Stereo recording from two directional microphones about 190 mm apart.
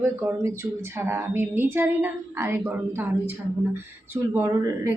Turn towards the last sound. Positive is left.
turn(degrees=-10)  # may be behind; listen again after turning